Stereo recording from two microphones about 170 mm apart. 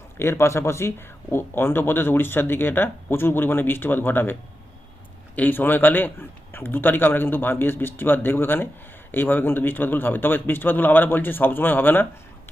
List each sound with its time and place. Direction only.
0.2 s speech: 15° left (ahead or behind)
5.4 s speech: 10° left (ahead or behind)